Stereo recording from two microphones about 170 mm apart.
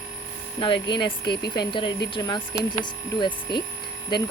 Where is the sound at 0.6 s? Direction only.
30° left (ahead or behind).